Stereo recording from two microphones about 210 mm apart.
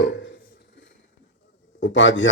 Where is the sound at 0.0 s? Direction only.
55° left (ahead or behind).